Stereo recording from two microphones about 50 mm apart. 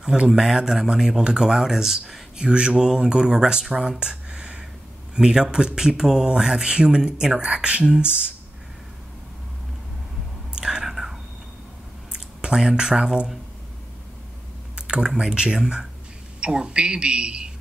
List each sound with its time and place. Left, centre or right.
0.0 s a man's voice: centre
0.3 s speech: centre
2.3 s speech: centre
10.6 s whispering: centre
12.1 s speech: centre
14.8 s a man's voice: centre